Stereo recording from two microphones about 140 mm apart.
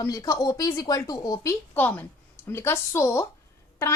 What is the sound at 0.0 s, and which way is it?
A woman's voice, 25° left (ahead or behind).